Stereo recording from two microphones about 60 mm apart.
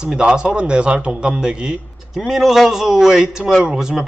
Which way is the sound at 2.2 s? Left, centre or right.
Centre.